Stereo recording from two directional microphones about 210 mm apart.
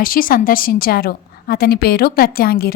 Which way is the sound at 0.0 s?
40° left (ahead or behind).